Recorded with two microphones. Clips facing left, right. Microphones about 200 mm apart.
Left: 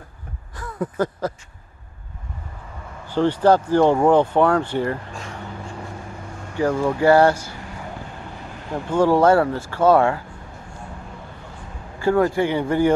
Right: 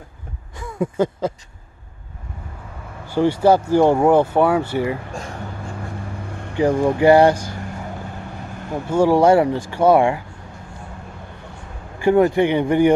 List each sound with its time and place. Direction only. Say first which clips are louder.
0.9 s speech: right 3 dB; 25° right (ahead or behind)
3.1 s speech: right 1 dB; 10° right (ahead or behind)
6.5 s speech: right 3 dB; 15° right (ahead or behind)
8.7 s speech: right 2 dB; 10° right (ahead or behind)
12.0 s speech: right 3 dB; 20° right (ahead or behind)